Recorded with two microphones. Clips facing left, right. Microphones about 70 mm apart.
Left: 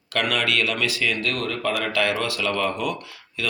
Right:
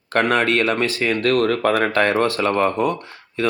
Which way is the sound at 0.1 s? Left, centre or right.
Right.